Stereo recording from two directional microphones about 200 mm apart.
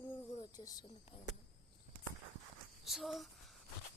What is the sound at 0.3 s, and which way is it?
Speech, 20° left (ahead or behind).